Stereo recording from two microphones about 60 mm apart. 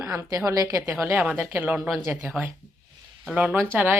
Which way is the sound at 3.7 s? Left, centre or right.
Right.